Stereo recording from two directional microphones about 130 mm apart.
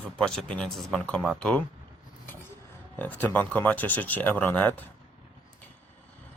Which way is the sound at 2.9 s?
15° left (ahead or behind).